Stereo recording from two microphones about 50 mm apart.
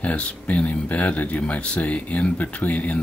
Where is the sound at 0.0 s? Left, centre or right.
Left.